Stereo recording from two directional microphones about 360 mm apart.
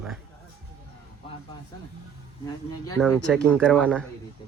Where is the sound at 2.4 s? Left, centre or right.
Centre.